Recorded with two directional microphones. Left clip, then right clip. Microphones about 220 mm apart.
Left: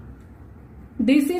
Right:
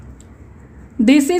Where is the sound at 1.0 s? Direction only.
50° right (ahead or behind).